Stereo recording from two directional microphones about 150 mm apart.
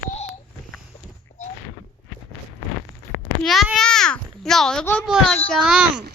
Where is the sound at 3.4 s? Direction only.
Centre (ahead or behind).